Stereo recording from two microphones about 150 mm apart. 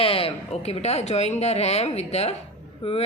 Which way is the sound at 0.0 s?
40° left (ahead or behind).